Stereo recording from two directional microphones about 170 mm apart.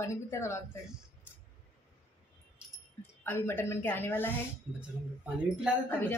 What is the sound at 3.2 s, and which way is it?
A woman's voice, 15° left (ahead or behind).